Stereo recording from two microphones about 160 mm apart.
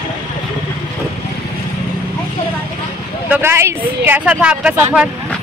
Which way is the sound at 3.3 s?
15° right (ahead or behind).